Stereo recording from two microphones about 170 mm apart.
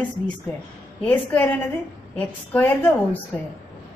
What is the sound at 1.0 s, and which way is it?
A woman's voice, 10° left (ahead or behind).